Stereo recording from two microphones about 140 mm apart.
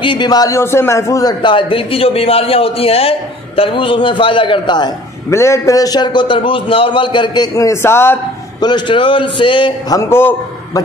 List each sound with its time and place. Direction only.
0.0 s a man's voice: 35° left (ahead or behind)
1.4 s a man's voice: 35° left (ahead or behind)
5.3 s a man's voice: 20° left (ahead or behind)
7.5 s a man's voice: 20° left (ahead or behind)
8.5 s a man's voice: 30° left (ahead or behind)